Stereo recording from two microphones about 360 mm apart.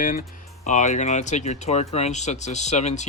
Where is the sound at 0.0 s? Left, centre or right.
Left.